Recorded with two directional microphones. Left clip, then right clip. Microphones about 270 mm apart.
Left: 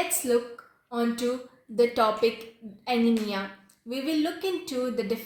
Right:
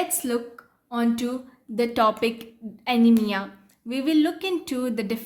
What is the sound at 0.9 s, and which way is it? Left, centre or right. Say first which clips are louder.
A woman's voice: right 1 dB; centre.